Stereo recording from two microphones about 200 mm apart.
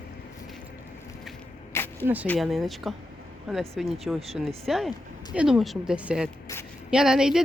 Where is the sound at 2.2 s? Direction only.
5° left (ahead or behind).